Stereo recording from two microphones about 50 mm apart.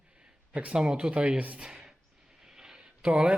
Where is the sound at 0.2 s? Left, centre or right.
Right.